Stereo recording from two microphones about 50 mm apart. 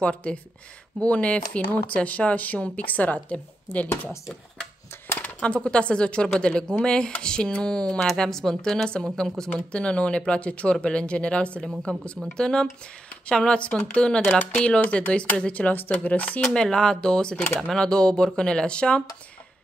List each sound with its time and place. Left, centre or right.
0.0 s speech: left
5.4 s speech: centre
8.0 s speech: centre
14.8 s speech: left
16.5 s speech: centre